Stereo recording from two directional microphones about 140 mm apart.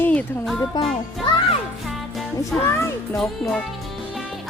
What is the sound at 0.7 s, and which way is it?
Speech, 30° left (ahead or behind).